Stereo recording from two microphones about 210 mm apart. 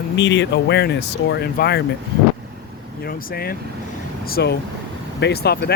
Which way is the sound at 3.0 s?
45° left (ahead or behind).